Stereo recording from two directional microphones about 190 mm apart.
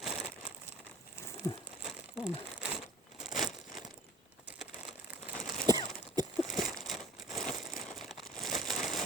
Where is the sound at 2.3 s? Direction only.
30° left (ahead or behind).